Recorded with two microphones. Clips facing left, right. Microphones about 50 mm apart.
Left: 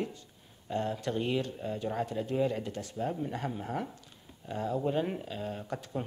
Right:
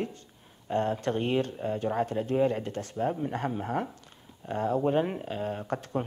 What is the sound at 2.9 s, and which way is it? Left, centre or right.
Speech, right.